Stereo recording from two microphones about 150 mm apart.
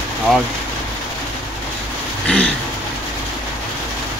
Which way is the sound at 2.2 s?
5° left (ahead or behind).